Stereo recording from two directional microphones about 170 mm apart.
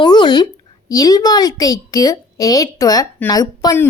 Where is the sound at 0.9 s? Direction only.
20° left (ahead or behind).